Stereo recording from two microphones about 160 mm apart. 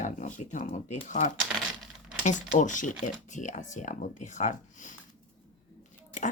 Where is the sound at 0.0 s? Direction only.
50° left (ahead or behind).